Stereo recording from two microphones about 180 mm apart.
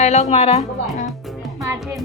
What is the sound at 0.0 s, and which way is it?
Speech, 35° left (ahead or behind).